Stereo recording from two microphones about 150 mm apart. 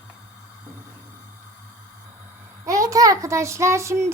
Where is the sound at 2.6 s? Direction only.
20° right (ahead or behind).